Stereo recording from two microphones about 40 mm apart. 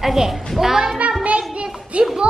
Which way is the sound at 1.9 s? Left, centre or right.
Right.